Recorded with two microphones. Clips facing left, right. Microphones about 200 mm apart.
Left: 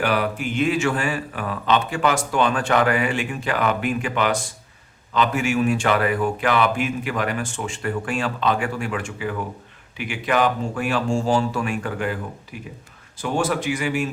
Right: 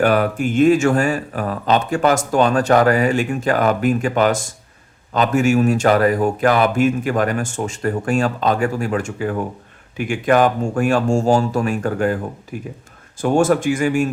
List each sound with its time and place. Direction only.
0.0 s speech: 45° right (ahead or behind)